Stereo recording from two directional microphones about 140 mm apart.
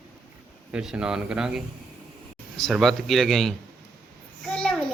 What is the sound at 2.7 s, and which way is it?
Speech, centre (ahead or behind).